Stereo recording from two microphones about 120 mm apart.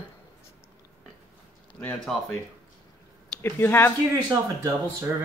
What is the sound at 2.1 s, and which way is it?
Speech, centre (ahead or behind).